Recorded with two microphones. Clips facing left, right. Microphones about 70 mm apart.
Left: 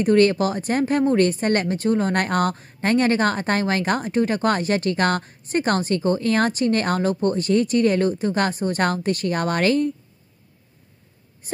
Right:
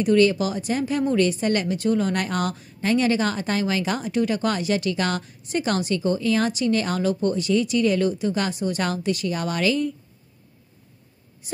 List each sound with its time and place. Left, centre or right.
0.0 s speech: left
11.4 s speech: left